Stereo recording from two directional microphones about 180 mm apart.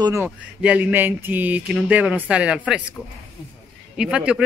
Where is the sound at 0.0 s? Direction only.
15° right (ahead or behind).